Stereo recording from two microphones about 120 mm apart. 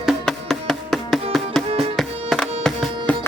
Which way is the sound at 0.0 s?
Centre (ahead or behind).